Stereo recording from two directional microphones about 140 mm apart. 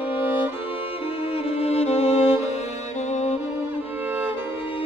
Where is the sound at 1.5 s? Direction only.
50° left (ahead or behind).